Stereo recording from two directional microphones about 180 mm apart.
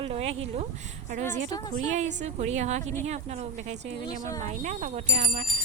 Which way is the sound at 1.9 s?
40° right (ahead or behind).